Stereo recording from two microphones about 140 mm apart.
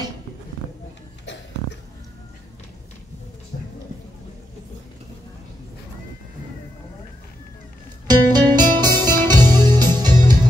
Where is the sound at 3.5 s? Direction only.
70° left (ahead or behind).